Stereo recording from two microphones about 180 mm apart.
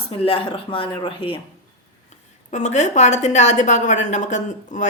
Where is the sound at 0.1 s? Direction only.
30° left (ahead or behind).